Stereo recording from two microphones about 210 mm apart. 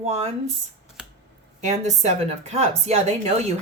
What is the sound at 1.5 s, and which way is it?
A woman's voice, 35° right (ahead or behind).